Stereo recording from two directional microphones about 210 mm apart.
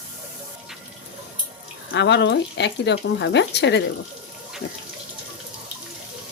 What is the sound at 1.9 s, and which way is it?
Speech, 55° left (ahead or behind).